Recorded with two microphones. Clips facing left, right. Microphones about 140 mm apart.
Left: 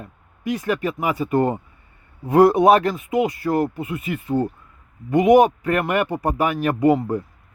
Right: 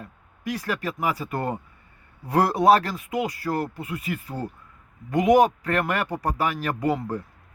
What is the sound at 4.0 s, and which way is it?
Speech, 40° right (ahead or behind).